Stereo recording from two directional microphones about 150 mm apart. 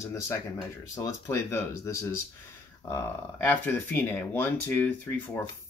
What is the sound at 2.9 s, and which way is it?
Speech, 15° left (ahead or behind).